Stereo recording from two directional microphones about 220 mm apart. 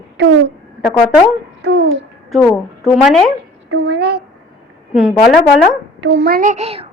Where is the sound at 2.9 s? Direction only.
Centre (ahead or behind).